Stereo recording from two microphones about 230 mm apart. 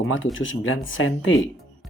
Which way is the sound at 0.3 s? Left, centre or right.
Left.